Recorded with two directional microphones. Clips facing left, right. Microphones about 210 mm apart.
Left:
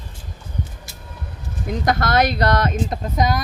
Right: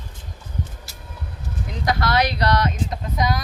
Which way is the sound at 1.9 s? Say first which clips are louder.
Left 2 dB; 50° left (ahead or behind).